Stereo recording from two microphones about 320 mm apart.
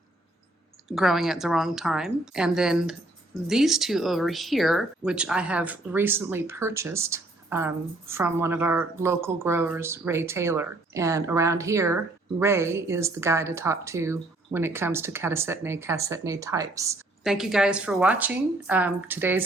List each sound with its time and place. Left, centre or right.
0.9 s a woman's voice: centre